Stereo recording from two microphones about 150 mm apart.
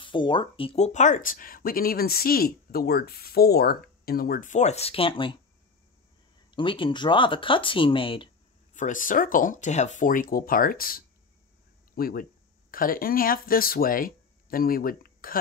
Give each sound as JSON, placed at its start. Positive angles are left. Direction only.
{"t": 0.0, "sound": "speech", "side_deg": 30}
{"t": 6.5, "sound": "speech", "side_deg": 35}
{"t": 8.7, "sound": "speech", "side_deg": 60}